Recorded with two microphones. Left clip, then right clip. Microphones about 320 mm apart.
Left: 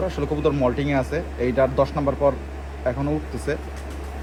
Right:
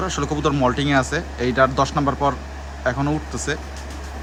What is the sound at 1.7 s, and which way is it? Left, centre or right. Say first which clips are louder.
Speech: right 1 dB; right.